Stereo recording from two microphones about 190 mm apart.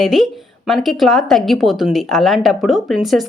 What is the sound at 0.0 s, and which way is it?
A woman's voice, centre (ahead or behind).